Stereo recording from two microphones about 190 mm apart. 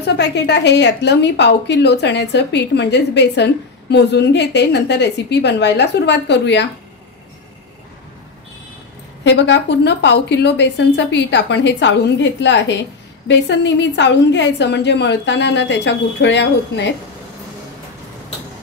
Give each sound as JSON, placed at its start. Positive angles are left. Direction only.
{"t": 0.0, "sound": "a woman's voice", "side_deg": 65}
{"t": 9.2, "sound": "a woman's voice", "side_deg": 70}